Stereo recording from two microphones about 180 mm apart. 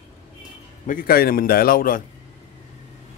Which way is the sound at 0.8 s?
55° left (ahead or behind).